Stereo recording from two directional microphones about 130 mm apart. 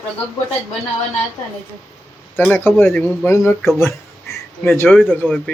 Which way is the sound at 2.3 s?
15° left (ahead or behind).